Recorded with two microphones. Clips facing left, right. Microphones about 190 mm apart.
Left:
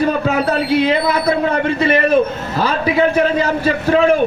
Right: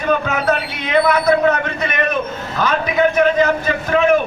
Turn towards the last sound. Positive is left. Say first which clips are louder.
# left 2 dB
turn(degrees=30)  # may be behind; listen again after turning